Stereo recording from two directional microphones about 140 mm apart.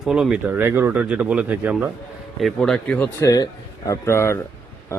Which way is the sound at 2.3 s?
Centre (ahead or behind).